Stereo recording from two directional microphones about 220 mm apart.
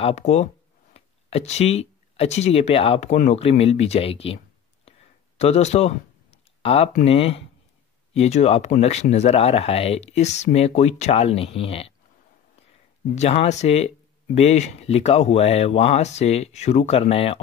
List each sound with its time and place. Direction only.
0.0 s speech: 30° left (ahead or behind)
5.4 s a sound: 30° left (ahead or behind)
7.1 s speech: 25° left (ahead or behind)
13.1 s speech: 30° left (ahead or behind)